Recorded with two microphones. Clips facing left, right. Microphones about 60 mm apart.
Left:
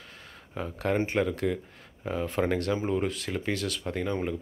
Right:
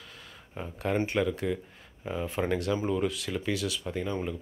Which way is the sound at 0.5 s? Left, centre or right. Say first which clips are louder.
Left 3 dB; left.